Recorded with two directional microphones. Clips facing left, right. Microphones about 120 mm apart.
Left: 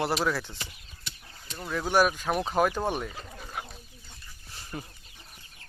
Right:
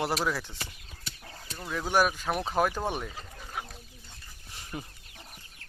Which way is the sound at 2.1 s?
Centre (ahead or behind).